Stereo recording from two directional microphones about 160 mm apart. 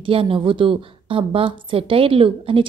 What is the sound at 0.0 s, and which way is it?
A woman's voice, 35° right (ahead or behind).